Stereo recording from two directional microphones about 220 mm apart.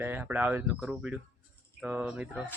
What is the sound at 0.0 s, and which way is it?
Speech, 10° right (ahead or behind).